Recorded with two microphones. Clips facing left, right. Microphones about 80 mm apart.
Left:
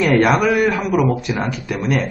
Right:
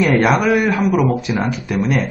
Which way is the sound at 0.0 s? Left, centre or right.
Centre.